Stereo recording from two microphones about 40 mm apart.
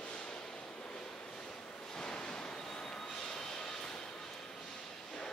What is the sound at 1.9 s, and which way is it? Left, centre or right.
Vehicle, centre.